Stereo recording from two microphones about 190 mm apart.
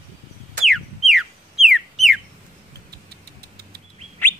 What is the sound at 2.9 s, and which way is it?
Engine, 60° right (ahead or behind).